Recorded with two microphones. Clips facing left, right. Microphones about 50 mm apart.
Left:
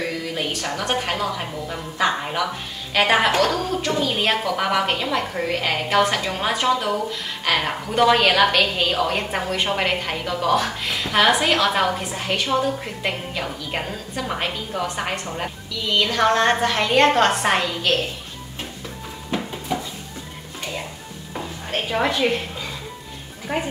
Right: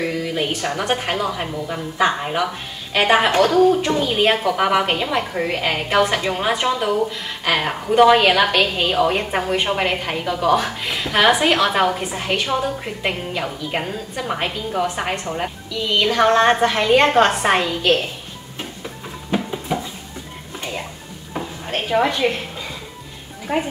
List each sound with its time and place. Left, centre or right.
0.0 s a woman's voice: centre
19.3 s a sound: centre
21.3 s dishes: centre
23.4 s speech: centre